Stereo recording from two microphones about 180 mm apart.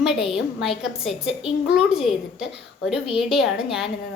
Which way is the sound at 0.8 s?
5° right (ahead or behind).